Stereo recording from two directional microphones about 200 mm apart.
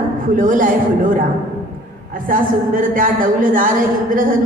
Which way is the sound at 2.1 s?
45° right (ahead or behind).